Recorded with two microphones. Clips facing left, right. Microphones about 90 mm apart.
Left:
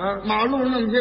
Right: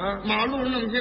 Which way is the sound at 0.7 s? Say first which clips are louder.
Left 5 dB; 30° left (ahead or behind).